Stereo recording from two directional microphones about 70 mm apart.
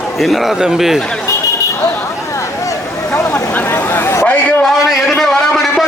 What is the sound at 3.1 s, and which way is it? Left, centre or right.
Speech, left.